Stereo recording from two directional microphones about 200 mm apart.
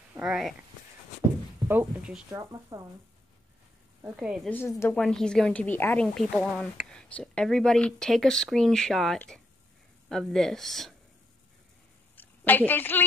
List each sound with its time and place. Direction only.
0.1 s speech: 5° right (ahead or behind)
1.7 s speech: 5° right (ahead or behind)
2.3 s speech: 20° right (ahead or behind)
4.2 s speech: 5° right (ahead or behind)
4.7 s speech: 10° left (ahead or behind)
12.2 s a woman's voice: 10° left (ahead or behind)